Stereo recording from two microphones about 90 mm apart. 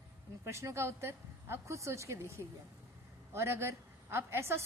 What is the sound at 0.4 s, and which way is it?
A woman's voice, 30° right (ahead or behind).